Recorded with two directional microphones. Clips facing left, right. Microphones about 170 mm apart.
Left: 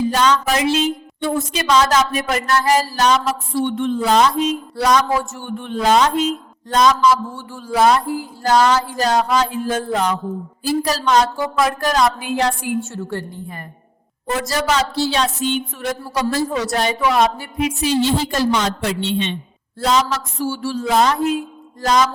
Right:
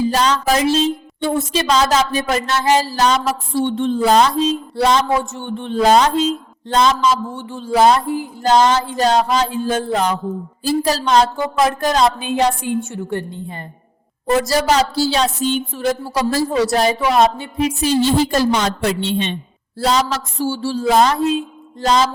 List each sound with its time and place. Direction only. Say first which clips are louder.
0.1 s speech: right 1 dB; 35° right (ahead or behind)
14.3 s speech: right 4 dB; 35° right (ahead or behind)